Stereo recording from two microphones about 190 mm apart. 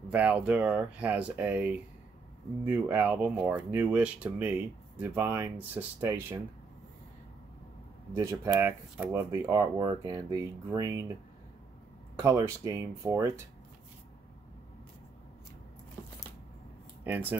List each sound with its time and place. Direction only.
0.1 s speech: 5° right (ahead or behind)
8.1 s speech: 15° right (ahead or behind)
12.2 s speech: 15° right (ahead or behind)
17.0 s speech: 10° right (ahead or behind)